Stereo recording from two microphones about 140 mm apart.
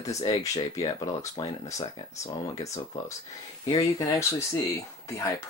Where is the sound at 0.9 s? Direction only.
25° left (ahead or behind).